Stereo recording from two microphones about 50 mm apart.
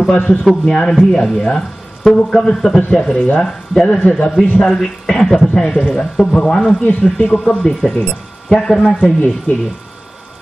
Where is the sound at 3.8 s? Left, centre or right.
Left.